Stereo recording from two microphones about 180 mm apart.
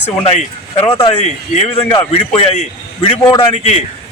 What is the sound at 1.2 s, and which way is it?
Speech, 40° left (ahead or behind).